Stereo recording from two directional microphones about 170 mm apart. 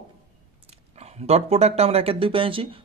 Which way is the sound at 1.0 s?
40° right (ahead or behind).